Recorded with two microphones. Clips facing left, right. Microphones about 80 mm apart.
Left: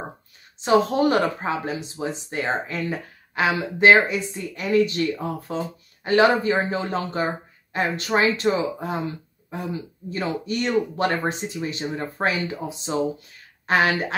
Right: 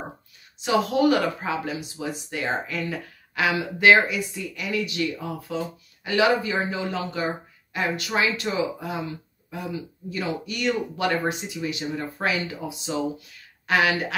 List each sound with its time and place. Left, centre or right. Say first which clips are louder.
0.6 s speech: left 3 dB; left